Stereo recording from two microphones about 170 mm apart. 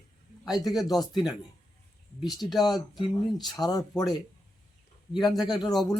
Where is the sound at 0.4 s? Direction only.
20° left (ahead or behind).